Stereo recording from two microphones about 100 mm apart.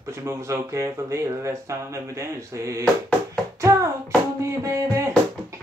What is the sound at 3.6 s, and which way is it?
Hands, 30° right (ahead or behind).